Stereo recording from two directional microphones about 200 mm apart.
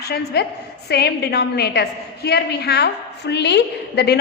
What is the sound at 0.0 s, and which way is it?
A woman's voice, 55° left (ahead or behind).